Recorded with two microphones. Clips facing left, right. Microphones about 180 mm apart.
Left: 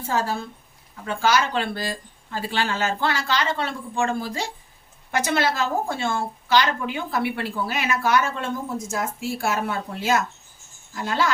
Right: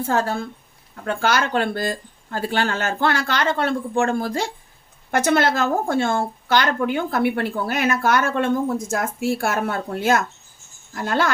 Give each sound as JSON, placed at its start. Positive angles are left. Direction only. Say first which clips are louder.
{"t": 0.1, "sound": "speech", "louder": "right 1 dB", "side_deg": -60}